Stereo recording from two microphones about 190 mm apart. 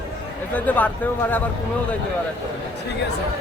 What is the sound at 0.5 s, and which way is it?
Speech, 10° left (ahead or behind).